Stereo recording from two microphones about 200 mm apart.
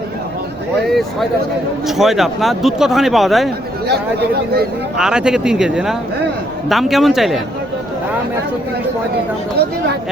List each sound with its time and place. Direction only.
0.9 s speech: centre (ahead or behind)
4.9 s speech: 5° right (ahead or behind)